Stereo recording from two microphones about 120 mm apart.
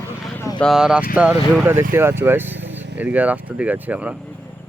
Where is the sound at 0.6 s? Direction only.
5° right (ahead or behind).